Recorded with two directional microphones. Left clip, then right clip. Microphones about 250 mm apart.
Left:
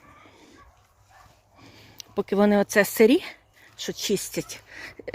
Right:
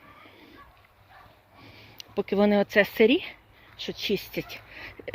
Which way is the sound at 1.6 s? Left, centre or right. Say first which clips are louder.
Left 1 dB; left.